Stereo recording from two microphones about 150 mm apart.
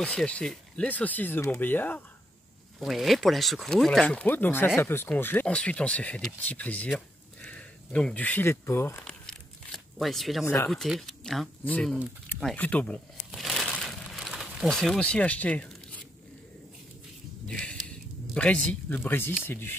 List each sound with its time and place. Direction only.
0.0 s speech: 5° left (ahead or behind)
2.8 s speech: centre (ahead or behind); by 9.1 s 15° left (ahead or behind)
9.9 s speech: centre (ahead or behind)
10.4 s speech: 20° left (ahead or behind)
10.7 s speech: centre (ahead or behind)
12.5 s crumpling: 10° left (ahead or behind)
17.5 s a sound: 5° left (ahead or behind)
18.3 s speech: 5° left (ahead or behind)